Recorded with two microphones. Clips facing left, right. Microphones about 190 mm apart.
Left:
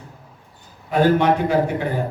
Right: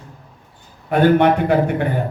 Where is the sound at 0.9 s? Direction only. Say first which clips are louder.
Right 3 dB; 60° right (ahead or behind).